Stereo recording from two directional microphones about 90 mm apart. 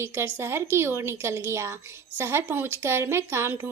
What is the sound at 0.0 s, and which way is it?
A woman's voice, 30° right (ahead or behind).